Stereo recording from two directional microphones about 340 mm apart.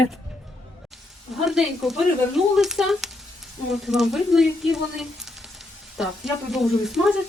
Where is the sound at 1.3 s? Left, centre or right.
Centre.